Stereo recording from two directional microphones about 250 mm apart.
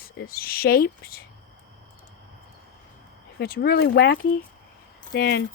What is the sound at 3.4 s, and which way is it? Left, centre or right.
Speech, left.